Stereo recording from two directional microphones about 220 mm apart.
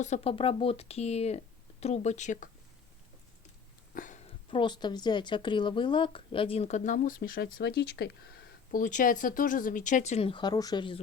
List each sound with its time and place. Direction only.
0.0 s speech: 30° left (ahead or behind)
3.9 s a sound: 35° left (ahead or behind)
4.5 s speech: 20° left (ahead or behind)